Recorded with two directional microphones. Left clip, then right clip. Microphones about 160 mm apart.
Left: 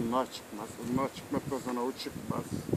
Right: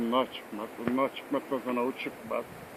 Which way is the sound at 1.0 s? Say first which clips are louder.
Right 4 dB; 25° left (ahead or behind).